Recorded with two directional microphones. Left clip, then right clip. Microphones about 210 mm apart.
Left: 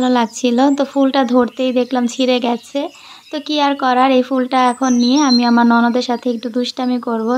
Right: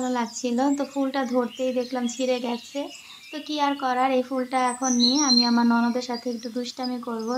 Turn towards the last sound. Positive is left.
turn(degrees=35)  # may be behind; listen again after turning